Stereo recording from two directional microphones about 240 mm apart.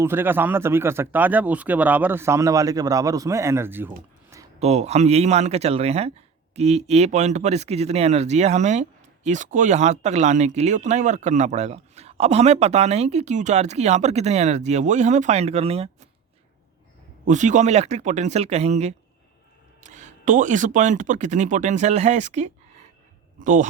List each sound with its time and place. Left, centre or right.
0.0 s speech: centre
4.6 s speech: right
17.2 s speech: right